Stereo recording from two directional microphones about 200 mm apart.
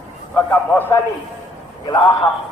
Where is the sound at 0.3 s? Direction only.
10° left (ahead or behind).